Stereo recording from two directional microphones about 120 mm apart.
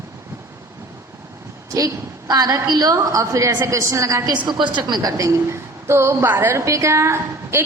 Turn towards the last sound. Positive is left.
turn(degrees=-25)  # may be behind; listen again after turning